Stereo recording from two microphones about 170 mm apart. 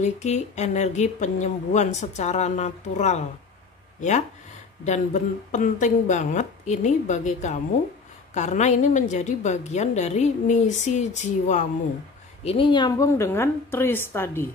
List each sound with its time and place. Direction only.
0.0 s speech: 45° left (ahead or behind)
4.8 s speech: 45° left (ahead or behind)
12.4 s a woman's voice: 30° left (ahead or behind); by 14.4 s 15° left (ahead or behind)